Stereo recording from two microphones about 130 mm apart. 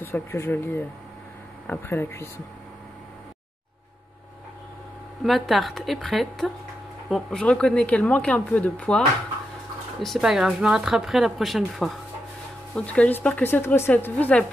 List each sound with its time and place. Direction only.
0.0 s speech: 20° left (ahead or behind)
5.2 s speech: centre (ahead or behind)